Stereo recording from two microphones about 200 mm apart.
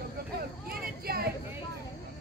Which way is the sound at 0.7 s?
50° right (ahead or behind).